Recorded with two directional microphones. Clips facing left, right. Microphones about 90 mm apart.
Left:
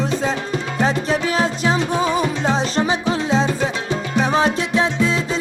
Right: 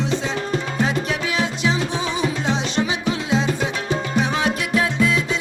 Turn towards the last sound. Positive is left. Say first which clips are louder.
# left 1 dB
turn(degrees=25)  # may be behind; listen again after turning